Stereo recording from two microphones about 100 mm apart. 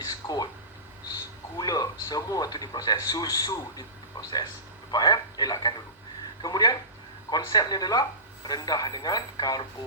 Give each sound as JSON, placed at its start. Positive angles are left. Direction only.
{"t": 1.5, "sound": "a man's voice", "side_deg": 40}